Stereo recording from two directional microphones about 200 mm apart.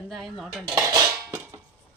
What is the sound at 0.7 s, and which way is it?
Dishes, 15° right (ahead or behind).